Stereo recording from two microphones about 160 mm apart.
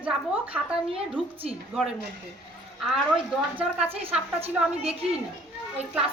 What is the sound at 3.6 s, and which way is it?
Speech, 10° right (ahead or behind).